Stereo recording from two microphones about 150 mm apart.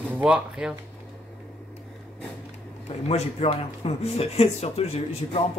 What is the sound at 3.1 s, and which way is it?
Speech, 45° left (ahead or behind).